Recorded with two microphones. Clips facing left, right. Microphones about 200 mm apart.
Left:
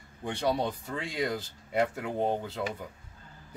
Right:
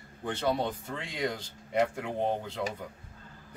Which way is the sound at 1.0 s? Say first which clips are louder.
Left 3 dB; 5° left (ahead or behind).